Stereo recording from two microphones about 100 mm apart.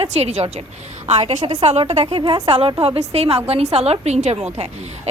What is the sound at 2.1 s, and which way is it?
Speech, 65° right (ahead or behind).